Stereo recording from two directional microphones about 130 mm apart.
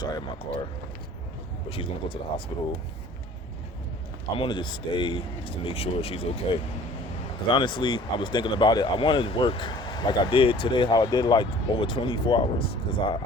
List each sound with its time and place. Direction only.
1.7 s speech: 45° left (ahead or behind)
4.4 s speech: 40° left (ahead or behind)
7.5 s speech: 40° left (ahead or behind)